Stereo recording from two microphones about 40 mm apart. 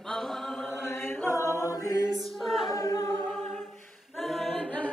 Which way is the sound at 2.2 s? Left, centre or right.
Centre.